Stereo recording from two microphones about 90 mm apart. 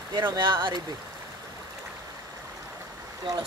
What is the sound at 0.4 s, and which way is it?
Speech, 60° right (ahead or behind).